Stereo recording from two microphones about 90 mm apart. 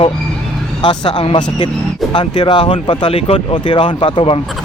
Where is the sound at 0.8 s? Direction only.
60° left (ahead or behind).